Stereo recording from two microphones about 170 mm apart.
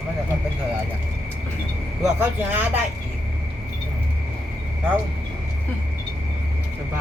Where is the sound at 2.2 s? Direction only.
10° right (ahead or behind).